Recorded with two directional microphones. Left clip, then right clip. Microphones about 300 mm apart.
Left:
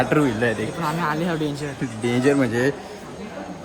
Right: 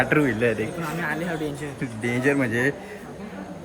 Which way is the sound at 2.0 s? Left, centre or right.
Centre.